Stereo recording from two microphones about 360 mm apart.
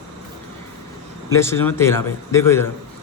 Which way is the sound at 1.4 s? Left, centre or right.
Centre.